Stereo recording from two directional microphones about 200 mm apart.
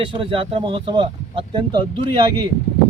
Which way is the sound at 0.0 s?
25° right (ahead or behind).